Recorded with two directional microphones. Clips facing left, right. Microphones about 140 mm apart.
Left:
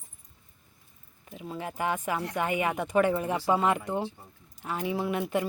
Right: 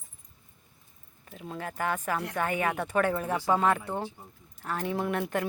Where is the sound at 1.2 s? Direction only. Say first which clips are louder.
Left 1 dB; 5° left (ahead or behind).